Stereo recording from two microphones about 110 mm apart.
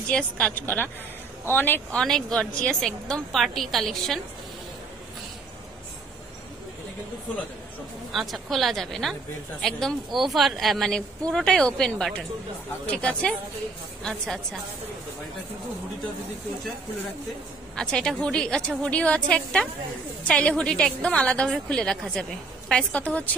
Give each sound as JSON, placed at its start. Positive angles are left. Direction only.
{"t": 0.1, "sound": "a woman's voice", "side_deg": 10}
{"t": 2.0, "sound": "speech", "side_deg": 5}
{"t": 8.1, "sound": "a woman's voice", "side_deg": 0}
{"t": 17.7, "sound": "a woman's voice", "side_deg": 10}